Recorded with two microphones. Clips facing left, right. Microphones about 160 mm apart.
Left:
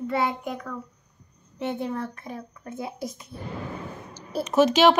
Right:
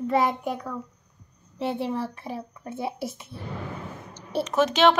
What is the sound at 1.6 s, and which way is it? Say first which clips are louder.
A child's voice: right 1 dB; 35° right (ahead or behind).